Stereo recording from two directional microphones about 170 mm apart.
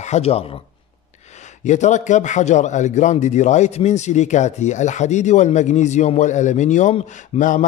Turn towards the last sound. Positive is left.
turn(degrees=45)  # may be behind; listen again after turning